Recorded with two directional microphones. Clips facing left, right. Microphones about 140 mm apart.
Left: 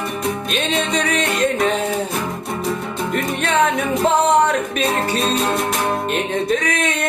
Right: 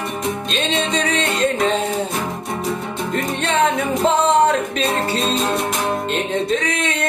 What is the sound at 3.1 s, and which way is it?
Music, 30° right (ahead or behind).